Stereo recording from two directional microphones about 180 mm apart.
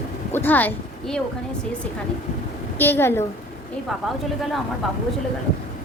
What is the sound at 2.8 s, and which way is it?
Speech, 10° left (ahead or behind).